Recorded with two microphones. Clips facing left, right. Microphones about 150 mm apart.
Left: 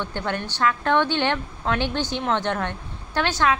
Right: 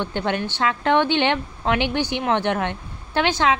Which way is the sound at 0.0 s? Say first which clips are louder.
Right 4 dB; 20° right (ahead or behind).